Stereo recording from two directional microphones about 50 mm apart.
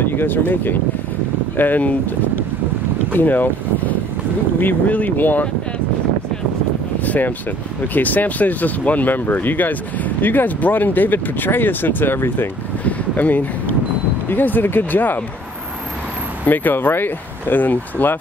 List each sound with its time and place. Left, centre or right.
0.0 s speech: left
7.1 s speech: left
12.8 s a sound: left
14.3 s speech: left
16.4 s speech: left